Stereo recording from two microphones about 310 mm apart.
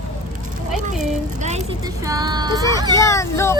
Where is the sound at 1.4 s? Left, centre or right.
Right.